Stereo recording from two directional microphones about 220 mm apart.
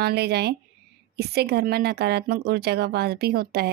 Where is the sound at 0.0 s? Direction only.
50° right (ahead or behind).